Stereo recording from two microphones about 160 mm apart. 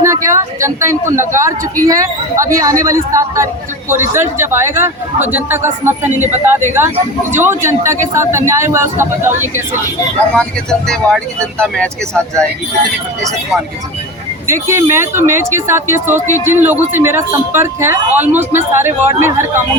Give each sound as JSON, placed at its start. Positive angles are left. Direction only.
{"t": 0.0, "sound": "speech", "side_deg": -20}
{"t": 10.3, "sound": "speech", "side_deg": 5}
{"t": 14.4, "sound": "speech", "side_deg": -15}